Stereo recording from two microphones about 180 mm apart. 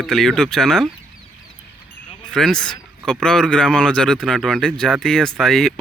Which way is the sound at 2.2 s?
5° left (ahead or behind).